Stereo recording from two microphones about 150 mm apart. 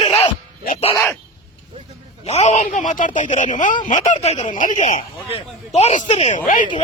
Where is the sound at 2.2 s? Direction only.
45° left (ahead or behind).